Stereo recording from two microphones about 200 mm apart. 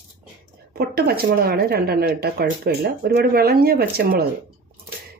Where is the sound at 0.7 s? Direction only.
50° right (ahead or behind).